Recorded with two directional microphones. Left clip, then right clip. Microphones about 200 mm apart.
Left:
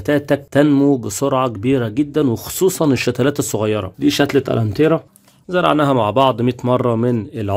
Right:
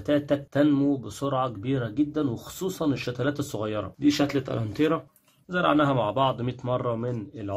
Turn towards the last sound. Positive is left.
turn(degrees=45)  # may be behind; listen again after turning